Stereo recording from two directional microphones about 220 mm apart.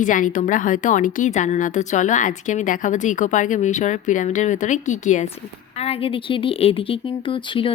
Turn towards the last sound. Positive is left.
turn(degrees=25)  # may be behind; listen again after turning